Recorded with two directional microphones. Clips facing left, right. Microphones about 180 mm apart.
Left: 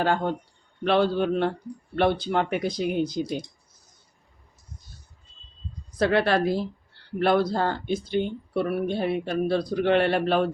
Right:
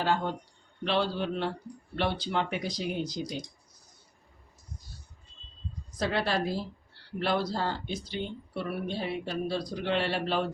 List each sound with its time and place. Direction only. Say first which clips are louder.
0.0 s speech: left 5 dB; 50° left (ahead or behind)
6.0 s speech: left 7 dB; 60° left (ahead or behind)